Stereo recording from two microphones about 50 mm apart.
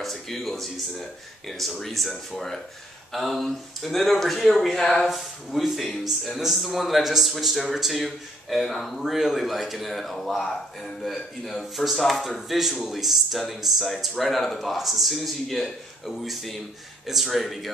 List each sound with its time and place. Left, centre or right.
0.0 s speech: centre